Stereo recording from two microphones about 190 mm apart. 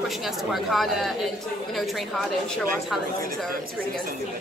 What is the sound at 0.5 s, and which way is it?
Speech, centre (ahead or behind).